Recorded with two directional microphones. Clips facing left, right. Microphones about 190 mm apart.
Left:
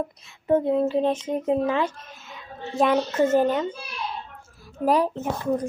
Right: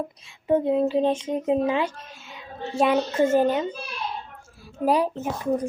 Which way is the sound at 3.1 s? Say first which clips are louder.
Even; 30° right (ahead or behind).